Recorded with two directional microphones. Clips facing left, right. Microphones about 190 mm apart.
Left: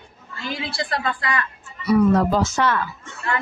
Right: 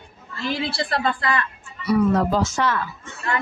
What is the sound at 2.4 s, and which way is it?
Speech, 60° left (ahead or behind).